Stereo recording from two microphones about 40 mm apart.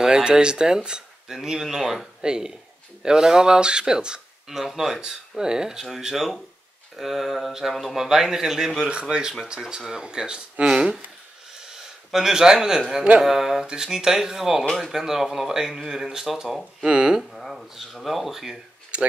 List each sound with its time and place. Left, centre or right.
0.0 s speech: centre
2.2 s speech: centre
4.5 s speech: centre
5.4 s a man's voice: centre
16.8 s speech: right
17.2 s speech: centre
18.9 s speech: right